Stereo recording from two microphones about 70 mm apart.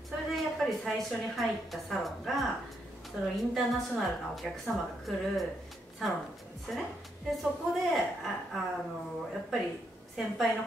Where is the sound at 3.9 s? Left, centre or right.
Centre.